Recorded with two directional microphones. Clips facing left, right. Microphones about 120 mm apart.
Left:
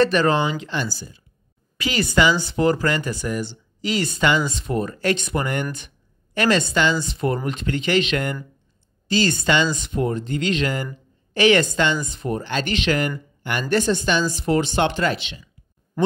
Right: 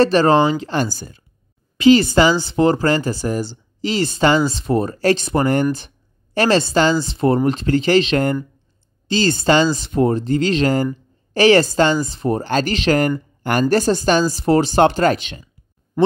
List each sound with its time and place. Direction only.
0.0 s speech: 35° right (ahead or behind); by 1.2 s 50° right (ahead or behind)
1.8 s speech: 30° right (ahead or behind); by 15.5 s 45° right (ahead or behind)